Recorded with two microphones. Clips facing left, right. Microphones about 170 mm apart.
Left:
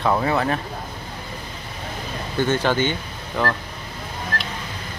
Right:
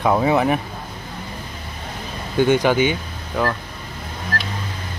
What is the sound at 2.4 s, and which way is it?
Speech, 15° right (ahead or behind).